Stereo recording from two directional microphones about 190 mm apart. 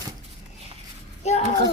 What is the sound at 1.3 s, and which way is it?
Speech, 35° left (ahead or behind).